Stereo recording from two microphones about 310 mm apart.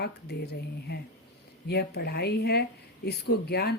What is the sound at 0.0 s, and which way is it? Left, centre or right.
Speech, left.